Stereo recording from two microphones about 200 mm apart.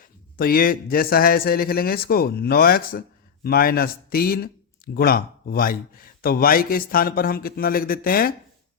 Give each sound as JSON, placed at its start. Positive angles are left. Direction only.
{"t": 0.0, "sound": "speech", "side_deg": 45}